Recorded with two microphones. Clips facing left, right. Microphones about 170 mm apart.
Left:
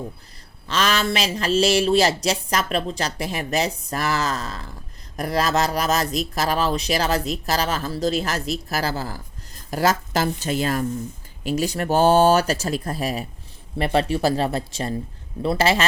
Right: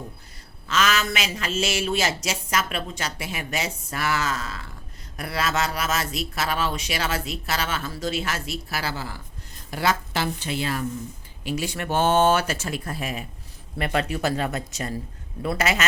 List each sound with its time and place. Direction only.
0.7 s speech: 35° left (ahead or behind)